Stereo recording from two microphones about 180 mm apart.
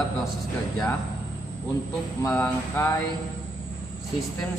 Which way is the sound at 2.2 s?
10° left (ahead or behind).